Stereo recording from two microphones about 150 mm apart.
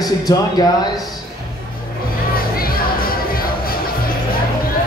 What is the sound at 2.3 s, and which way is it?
Music, 80° left.